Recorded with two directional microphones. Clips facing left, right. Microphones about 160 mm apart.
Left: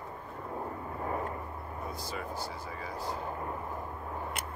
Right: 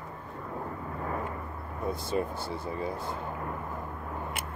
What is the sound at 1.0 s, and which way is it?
Vehicle, 25° left (ahead or behind).